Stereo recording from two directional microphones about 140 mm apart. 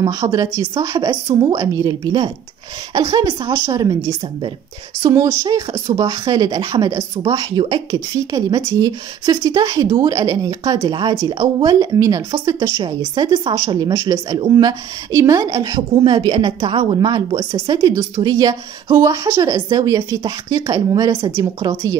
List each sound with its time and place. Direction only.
0.0 s a woman's voice: 25° right (ahead or behind)